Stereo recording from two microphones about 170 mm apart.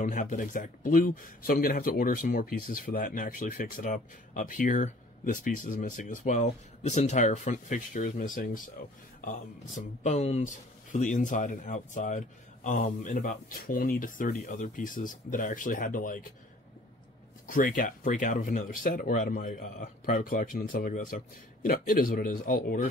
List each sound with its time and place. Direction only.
0.0 s speech: 50° left (ahead or behind)
17.5 s speech: 50° left (ahead or behind)